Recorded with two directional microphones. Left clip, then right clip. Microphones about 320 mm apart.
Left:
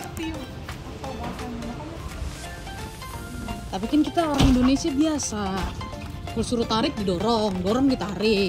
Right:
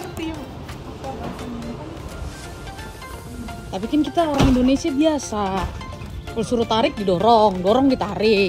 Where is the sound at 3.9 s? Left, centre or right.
Centre.